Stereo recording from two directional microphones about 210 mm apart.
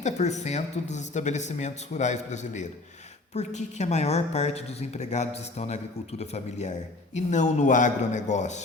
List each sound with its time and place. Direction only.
0.0 s a woman's voice: 35° left (ahead or behind)